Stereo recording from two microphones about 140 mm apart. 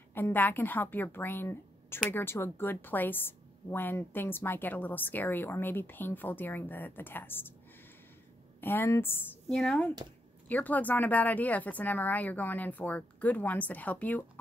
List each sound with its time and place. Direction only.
0.1 s a woman's voice: 15° left (ahead or behind)
8.5 s a woman's voice: 15° left (ahead or behind)
9.5 s a woman's voice: 5° left (ahead or behind)